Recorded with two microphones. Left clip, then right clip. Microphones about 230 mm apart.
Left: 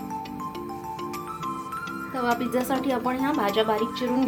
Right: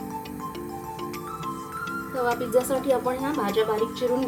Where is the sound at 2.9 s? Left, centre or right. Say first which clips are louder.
Even; centre.